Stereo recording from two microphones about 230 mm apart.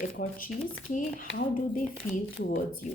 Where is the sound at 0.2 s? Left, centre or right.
Left.